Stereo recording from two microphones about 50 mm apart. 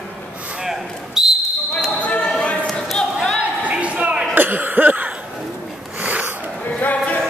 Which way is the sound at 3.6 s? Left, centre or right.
Right.